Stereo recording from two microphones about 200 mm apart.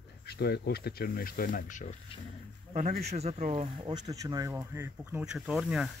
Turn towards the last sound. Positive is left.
turn(degrees=-5)  # may be behind; listen again after turning